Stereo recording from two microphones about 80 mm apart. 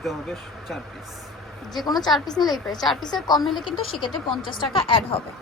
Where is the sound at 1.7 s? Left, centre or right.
Left.